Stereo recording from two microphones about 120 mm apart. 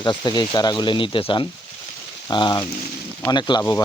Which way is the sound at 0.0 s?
40° left (ahead or behind).